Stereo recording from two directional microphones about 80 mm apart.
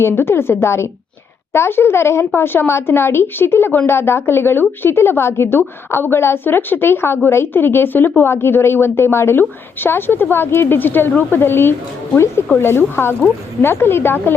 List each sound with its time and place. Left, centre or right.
0.0 s a woman's voice: left